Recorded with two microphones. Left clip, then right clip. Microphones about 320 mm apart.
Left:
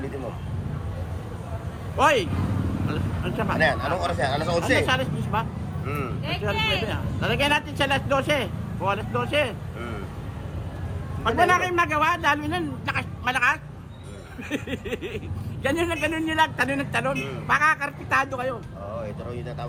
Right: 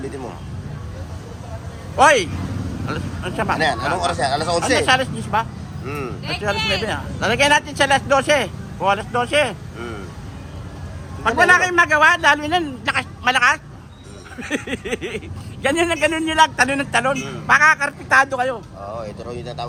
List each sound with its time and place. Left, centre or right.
2.0 s a man's voice: right
4.0 s speech: centre
4.8 s a man's voice: right
5.8 s speech: centre
6.8 s a man's voice: right
11.2 s a man's voice: right
19.3 s speech: centre